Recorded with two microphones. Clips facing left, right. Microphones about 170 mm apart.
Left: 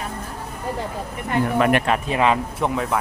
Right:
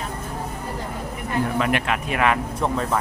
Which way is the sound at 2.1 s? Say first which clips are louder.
Even; 25° left (ahead or behind).